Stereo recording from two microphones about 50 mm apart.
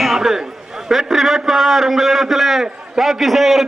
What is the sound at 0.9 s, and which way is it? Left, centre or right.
A man's voice, centre.